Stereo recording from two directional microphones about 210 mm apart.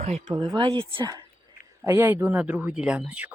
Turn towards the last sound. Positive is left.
turn(degrees=-5)  # may be behind; listen again after turning